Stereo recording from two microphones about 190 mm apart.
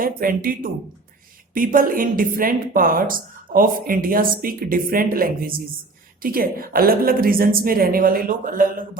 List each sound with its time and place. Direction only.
0.0 s a woman's voice: 45° right (ahead or behind)